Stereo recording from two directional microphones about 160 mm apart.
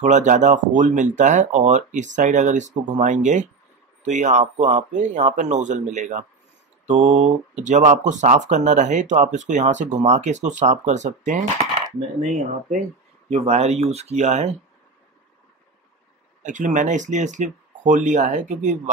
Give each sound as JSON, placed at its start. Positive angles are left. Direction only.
{"t": 0.0, "sound": "speech", "side_deg": -50}
{"t": 16.4, "sound": "speech", "side_deg": -50}